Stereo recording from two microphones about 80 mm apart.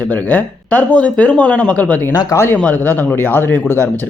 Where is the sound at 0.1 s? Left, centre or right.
Left.